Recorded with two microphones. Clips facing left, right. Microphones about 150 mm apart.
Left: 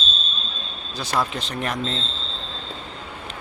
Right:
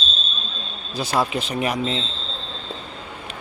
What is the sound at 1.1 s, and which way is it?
Speech, 10° right (ahead or behind).